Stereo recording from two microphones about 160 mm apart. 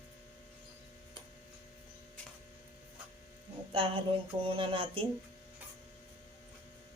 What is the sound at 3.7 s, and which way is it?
Speech, 35° right (ahead or behind).